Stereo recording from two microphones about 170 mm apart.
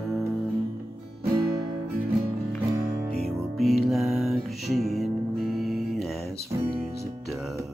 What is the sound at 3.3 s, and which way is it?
Music, centre (ahead or behind).